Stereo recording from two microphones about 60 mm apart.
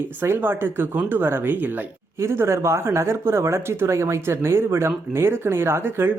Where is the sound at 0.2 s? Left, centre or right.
Right.